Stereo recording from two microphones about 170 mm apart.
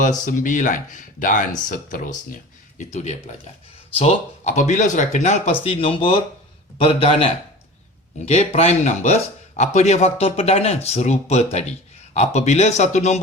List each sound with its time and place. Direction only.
0.3 s speech: 50° left (ahead or behind)